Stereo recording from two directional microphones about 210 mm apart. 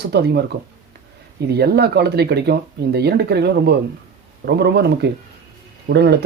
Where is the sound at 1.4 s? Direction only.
50° right (ahead or behind).